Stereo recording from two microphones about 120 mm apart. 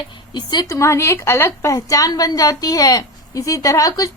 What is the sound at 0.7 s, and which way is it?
A woman's voice, 25° left (ahead or behind).